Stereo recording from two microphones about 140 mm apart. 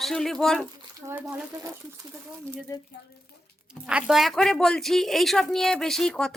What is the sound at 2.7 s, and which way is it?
Speech, 20° left (ahead or behind).